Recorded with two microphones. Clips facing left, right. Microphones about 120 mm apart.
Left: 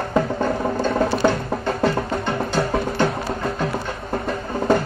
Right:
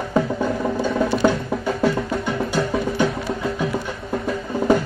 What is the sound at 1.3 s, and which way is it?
Music, 50° left (ahead or behind).